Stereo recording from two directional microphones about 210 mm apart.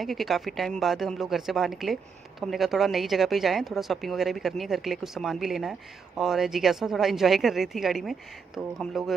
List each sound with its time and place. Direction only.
0.0 s a woman's voice: centre (ahead or behind)